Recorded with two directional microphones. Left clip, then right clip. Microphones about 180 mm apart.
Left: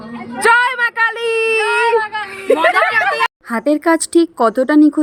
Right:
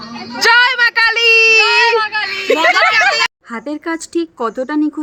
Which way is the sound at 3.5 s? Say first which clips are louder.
Left 8 dB; 30° left (ahead or behind).